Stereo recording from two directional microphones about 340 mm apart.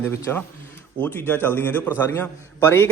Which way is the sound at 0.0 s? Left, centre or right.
Centre.